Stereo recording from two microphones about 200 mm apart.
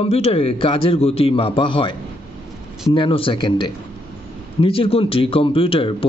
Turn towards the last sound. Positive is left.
turn(degrees=25)  # may be behind; listen again after turning